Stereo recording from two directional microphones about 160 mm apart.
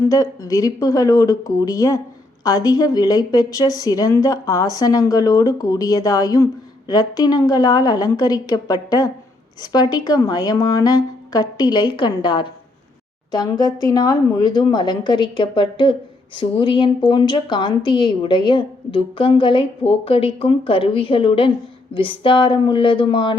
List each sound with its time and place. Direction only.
0.0 s a woman's voice: 20° left (ahead or behind)